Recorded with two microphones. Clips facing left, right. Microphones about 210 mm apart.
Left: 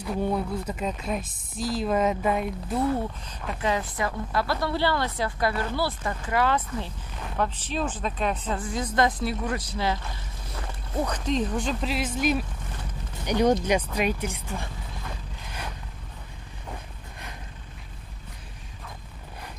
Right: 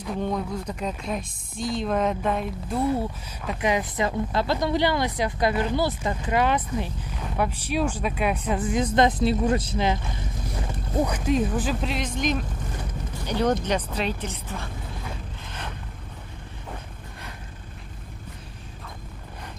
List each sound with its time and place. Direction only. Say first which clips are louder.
0.0 s speech: left 1 dB; 10° left (ahead or behind)
2.9 s speech: right 2 dB; 5° right (ahead or behind)
3.6 s speech: right 3 dB; 15° right (ahead or behind); by 14.7 s 10° left (ahead or behind)